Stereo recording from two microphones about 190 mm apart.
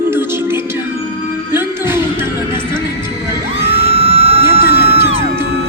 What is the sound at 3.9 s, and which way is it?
Music, 30° right (ahead or behind).